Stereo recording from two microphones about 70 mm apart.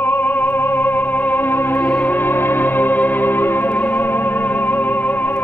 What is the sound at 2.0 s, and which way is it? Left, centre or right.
Music, left.